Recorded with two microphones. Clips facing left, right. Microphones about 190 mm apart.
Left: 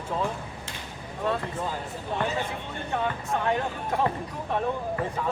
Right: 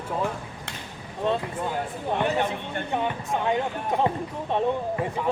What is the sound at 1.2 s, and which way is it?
Speech, 25° right (ahead or behind).